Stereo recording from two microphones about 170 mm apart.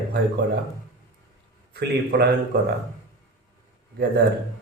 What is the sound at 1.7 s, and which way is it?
Speech, 75° right (ahead or behind).